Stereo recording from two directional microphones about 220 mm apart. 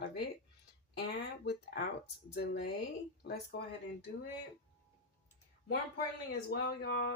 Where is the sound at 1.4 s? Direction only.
50° left (ahead or behind).